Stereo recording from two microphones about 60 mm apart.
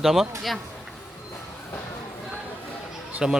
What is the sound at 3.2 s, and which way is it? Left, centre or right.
Speech, centre.